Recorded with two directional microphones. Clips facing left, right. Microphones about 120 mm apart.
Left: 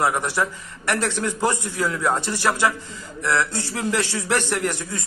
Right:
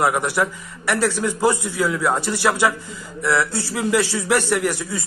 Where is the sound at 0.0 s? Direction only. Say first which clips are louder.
Right 2 dB; 15° right (ahead or behind).